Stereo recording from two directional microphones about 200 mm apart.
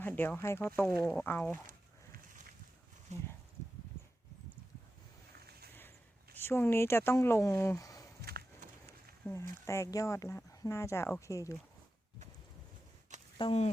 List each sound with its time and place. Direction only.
0.0 s speech: 10° left (ahead or behind)
3.1 s speech: 35° right (ahead or behind)
5.5 s a sound: 50° right (ahead or behind)
6.3 s speech: 10° left (ahead or behind)
8.2 s a sound: 50° right (ahead or behind)
9.2 s speech: 15° left (ahead or behind)
13.4 s speech: 30° left (ahead or behind)